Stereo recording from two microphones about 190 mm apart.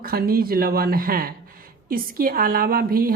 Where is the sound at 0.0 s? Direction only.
50° right (ahead or behind).